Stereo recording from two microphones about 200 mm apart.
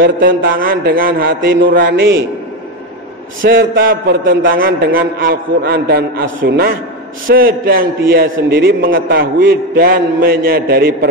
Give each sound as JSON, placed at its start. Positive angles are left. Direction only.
{"t": 0.0, "sound": "a man's voice", "side_deg": -45}
{"t": 3.4, "sound": "a man's voice", "side_deg": -50}